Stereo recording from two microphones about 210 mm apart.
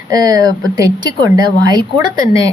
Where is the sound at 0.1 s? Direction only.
15° right (ahead or behind).